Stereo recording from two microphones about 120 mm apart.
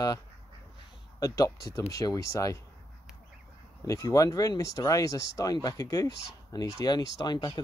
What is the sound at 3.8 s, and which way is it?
Speech, 25° left (ahead or behind).